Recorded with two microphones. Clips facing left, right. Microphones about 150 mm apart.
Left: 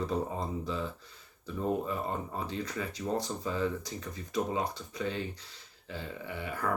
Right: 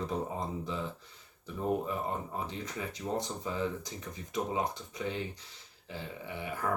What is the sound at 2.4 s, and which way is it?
Speech, 20° right (ahead or behind).